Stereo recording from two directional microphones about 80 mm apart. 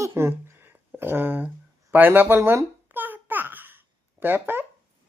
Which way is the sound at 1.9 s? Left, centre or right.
Right.